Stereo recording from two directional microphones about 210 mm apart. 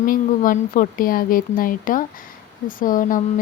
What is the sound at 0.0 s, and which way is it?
Speech, 40° left (ahead or behind).